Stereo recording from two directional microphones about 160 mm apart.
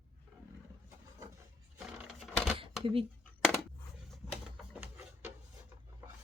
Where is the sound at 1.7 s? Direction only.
5° right (ahead or behind).